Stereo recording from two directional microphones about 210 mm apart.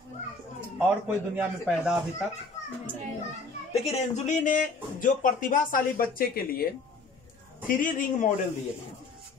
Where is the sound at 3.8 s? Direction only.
35° left (ahead or behind).